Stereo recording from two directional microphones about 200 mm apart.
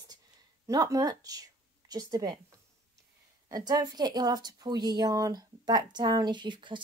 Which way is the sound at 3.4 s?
20° right (ahead or behind).